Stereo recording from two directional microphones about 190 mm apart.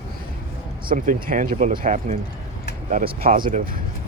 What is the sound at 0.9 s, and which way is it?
Speech, 45° right (ahead or behind).